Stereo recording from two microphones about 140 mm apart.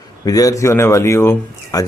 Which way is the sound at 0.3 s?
25° left (ahead or behind).